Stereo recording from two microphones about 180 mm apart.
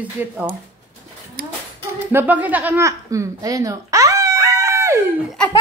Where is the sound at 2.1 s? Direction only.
10° right (ahead or behind).